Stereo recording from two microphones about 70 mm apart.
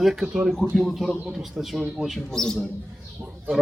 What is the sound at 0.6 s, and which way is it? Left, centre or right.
A man's voice, centre.